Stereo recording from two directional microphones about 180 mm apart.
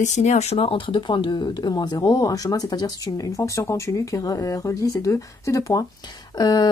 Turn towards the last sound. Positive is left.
turn(degrees=20)  # may be behind; listen again after turning